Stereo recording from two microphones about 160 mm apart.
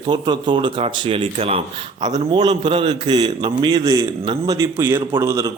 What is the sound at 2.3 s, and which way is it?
A man's voice, 25° right (ahead or behind).